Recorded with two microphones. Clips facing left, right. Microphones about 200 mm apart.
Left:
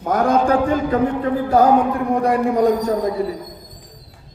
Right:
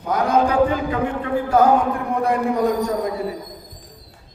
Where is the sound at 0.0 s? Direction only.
50° left (ahead or behind).